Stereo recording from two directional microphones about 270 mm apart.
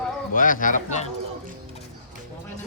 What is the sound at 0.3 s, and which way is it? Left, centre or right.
Speech, left.